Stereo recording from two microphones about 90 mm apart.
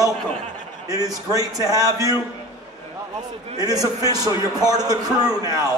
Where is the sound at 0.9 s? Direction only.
40° right (ahead or behind).